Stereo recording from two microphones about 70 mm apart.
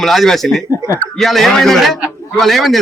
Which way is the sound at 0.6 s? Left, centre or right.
Left.